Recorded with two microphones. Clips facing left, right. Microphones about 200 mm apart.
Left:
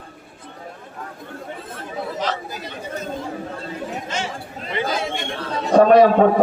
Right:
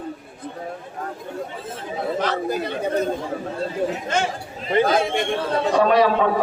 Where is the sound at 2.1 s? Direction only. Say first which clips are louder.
Right 7 dB; 55° right (ahead or behind).